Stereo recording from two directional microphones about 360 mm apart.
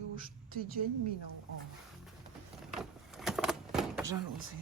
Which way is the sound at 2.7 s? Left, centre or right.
Centre.